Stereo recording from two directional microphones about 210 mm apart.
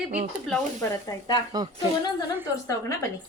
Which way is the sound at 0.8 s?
20° left (ahead or behind).